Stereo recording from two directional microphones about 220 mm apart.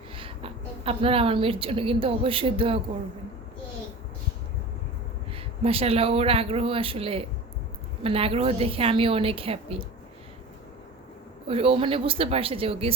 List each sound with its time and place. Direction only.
0.2 s a woman's voice: 25° right (ahead or behind)
5.3 s speech: 25° right (ahead or behind)
11.4 s speech: 25° right (ahead or behind)